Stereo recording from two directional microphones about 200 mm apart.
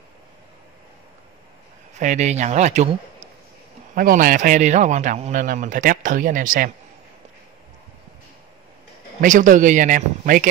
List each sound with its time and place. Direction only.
2.0 s a man's voice: 35° right (ahead or behind)
3.9 s a man's voice: 45° right (ahead or behind)
9.2 s a man's voice: 40° right (ahead or behind)